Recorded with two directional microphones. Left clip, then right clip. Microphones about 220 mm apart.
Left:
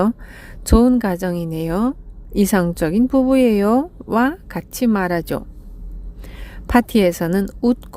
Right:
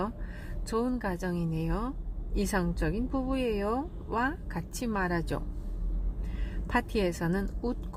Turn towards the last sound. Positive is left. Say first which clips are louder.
# left 15 dB
turn(degrees=45)  # may be behind; listen again after turning